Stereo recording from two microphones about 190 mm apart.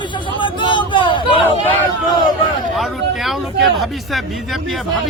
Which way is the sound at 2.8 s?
Centre (ahead or behind).